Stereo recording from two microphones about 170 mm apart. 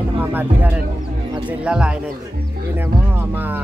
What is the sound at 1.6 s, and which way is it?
Music, 5° right (ahead or behind).